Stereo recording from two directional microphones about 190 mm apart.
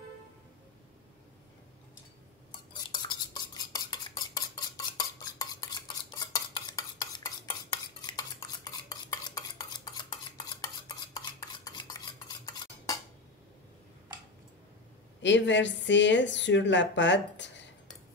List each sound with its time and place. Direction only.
2.7 s stir: 25° left (ahead or behind)
15.2 s speech: 70° left (ahead or behind)